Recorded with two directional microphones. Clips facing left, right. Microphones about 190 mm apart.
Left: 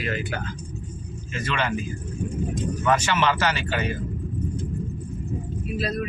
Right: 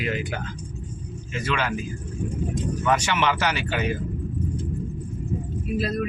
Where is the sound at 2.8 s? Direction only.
15° right (ahead or behind).